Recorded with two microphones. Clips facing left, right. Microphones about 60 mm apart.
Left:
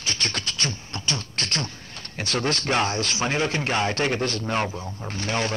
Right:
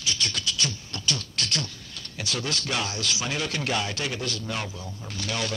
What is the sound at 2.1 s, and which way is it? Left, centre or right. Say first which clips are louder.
A man's voice: left 5 dB; left.